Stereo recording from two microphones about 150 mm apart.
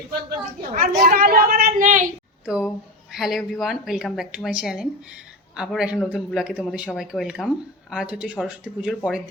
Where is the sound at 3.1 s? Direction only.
Centre (ahead or behind).